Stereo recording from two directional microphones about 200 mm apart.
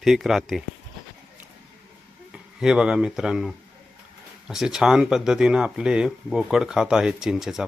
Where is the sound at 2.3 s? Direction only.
5° right (ahead or behind).